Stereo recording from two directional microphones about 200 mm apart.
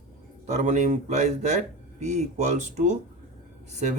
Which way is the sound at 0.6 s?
35° right (ahead or behind).